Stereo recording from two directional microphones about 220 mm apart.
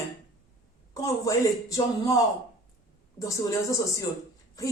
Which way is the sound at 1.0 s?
15° left (ahead or behind).